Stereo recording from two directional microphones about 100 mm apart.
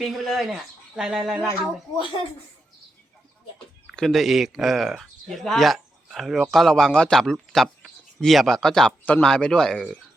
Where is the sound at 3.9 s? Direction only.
Centre (ahead or behind).